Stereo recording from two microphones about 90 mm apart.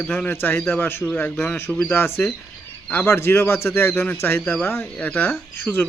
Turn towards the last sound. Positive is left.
turn(degrees=20)  # may be behind; listen again after turning